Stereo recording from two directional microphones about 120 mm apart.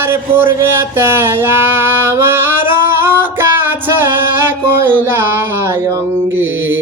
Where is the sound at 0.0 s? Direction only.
20° right (ahead or behind).